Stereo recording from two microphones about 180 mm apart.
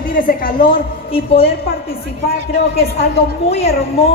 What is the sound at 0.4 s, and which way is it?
Speech, 50° left (ahead or behind).